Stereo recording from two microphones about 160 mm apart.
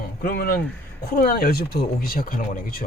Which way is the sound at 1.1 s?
65° left (ahead or behind).